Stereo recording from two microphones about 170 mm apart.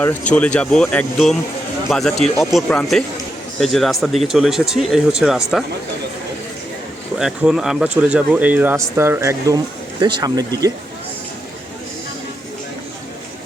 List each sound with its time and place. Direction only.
0.0 s speech: 10° left (ahead or behind)
7.2 s speech: 5° right (ahead or behind)
10.0 s speech: 25° right (ahead or behind)